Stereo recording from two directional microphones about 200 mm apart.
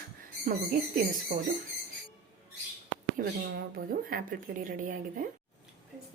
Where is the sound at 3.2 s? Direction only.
45° right (ahead or behind).